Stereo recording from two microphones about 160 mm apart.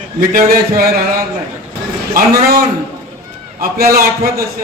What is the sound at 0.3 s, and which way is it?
Speech, 65° right (ahead or behind).